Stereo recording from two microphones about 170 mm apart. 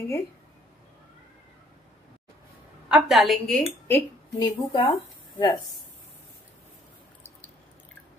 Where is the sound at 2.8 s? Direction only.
5° right (ahead or behind).